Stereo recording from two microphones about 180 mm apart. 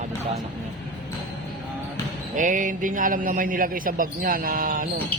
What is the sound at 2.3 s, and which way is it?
A man's voice, 45° right (ahead or behind).